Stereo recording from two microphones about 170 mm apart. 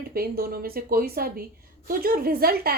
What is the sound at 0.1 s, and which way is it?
A woman's voice, 60° right (ahead or behind).